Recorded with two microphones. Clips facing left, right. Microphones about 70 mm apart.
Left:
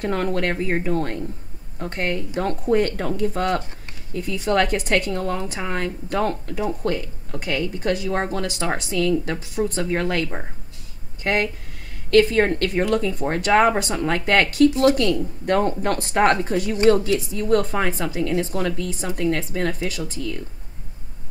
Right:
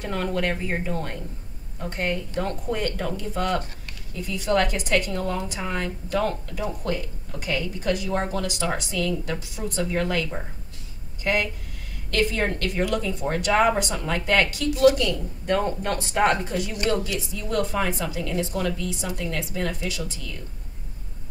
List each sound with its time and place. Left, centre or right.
0.0 s a woman's voice: left